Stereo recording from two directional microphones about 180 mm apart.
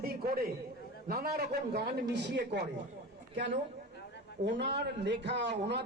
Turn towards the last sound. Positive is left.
turn(degrees=-75)  # may be behind; listen again after turning